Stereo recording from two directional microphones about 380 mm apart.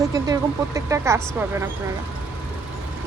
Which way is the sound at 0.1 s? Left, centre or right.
Centre.